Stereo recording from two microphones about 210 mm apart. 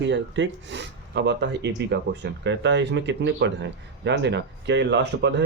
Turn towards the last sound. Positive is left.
turn(degrees=-55)  # may be behind; listen again after turning